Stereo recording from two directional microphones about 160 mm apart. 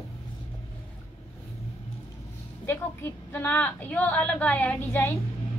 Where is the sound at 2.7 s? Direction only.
15° left (ahead or behind).